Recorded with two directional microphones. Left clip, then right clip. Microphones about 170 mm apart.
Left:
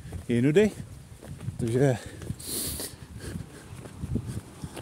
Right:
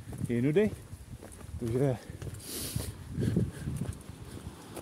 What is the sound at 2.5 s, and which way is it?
Dog, 20° left (ahead or behind).